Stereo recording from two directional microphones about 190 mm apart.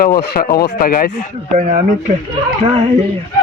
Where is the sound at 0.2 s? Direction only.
50° left (ahead or behind).